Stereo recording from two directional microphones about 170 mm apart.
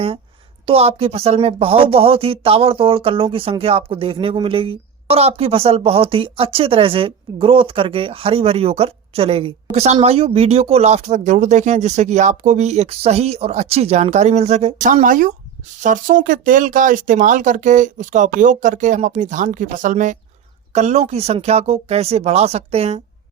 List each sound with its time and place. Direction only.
0.7 s speech: 35° right (ahead or behind)